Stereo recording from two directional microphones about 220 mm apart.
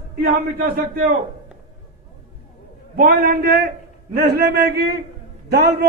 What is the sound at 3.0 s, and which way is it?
A man's voice, 45° right (ahead or behind).